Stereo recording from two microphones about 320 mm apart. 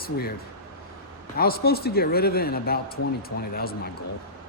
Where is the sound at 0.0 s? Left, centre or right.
Left.